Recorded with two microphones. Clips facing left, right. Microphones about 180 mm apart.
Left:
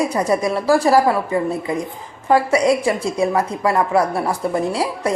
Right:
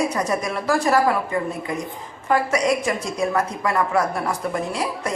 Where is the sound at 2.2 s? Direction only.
30° left (ahead or behind).